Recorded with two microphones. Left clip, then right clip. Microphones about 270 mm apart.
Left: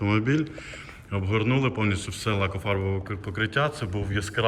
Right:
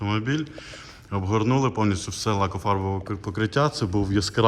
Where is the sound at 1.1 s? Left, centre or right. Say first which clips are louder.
Right 2 dB; centre.